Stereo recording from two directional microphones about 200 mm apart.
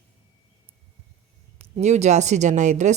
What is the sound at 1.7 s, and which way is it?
Speech, 35° right (ahead or behind).